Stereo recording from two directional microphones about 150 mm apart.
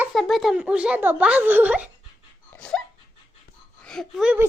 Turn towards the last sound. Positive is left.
turn(degrees=-10)  # may be behind; listen again after turning